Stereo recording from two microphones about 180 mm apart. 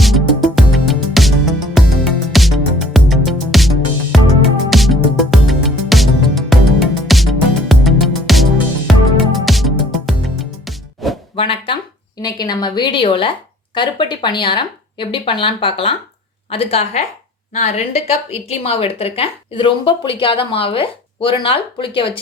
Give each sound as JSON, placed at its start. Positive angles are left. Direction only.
{"t": 0.0, "sound": "music", "side_deg": 0}
{"t": 11.3, "sound": "a sound", "side_deg": 30}
{"t": 12.2, "sound": "a woman's voice", "side_deg": 20}